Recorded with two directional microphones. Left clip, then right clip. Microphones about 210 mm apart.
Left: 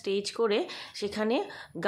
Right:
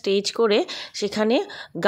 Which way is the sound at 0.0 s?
40° right (ahead or behind).